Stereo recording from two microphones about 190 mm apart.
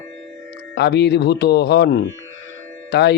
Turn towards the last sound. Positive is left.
turn(degrees=60)  # may be behind; listen again after turning